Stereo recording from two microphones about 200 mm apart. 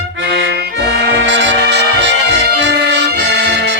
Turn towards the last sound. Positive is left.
turn(degrees=-60)  # may be behind; listen again after turning